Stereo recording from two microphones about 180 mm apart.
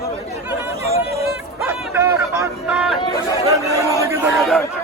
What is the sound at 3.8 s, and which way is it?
Crowd, 15° right (ahead or behind).